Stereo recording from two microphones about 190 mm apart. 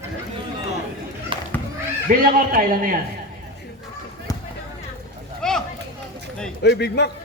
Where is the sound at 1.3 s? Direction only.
25° right (ahead or behind).